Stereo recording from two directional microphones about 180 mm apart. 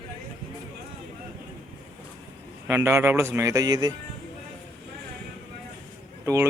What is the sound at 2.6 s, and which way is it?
Speech, 15° right (ahead or behind).